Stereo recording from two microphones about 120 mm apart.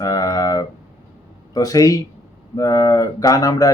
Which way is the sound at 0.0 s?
30° left (ahead or behind).